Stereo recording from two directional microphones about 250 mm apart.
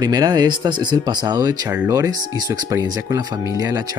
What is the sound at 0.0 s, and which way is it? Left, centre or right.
Speech, centre.